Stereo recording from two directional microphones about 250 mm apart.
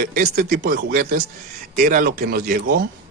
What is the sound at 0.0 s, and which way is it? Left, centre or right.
Speech, right.